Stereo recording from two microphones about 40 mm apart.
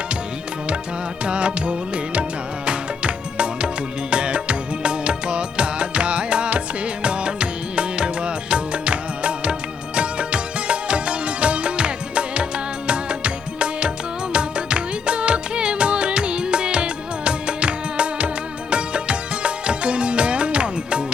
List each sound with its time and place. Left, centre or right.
1.2 s music: right